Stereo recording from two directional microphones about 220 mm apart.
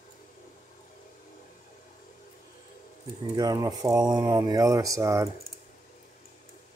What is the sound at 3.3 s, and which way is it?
Speech, 15° right (ahead or behind).